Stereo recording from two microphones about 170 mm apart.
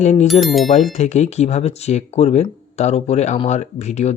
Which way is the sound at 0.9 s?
40° left (ahead or behind).